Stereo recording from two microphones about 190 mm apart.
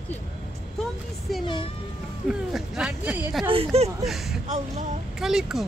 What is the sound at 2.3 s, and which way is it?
Speech, 5° right (ahead or behind).